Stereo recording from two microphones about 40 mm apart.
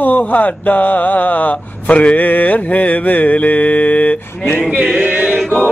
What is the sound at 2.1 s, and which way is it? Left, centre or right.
Mantra, left.